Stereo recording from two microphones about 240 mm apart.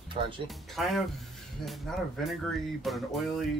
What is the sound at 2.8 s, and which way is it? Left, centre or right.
Speech, centre.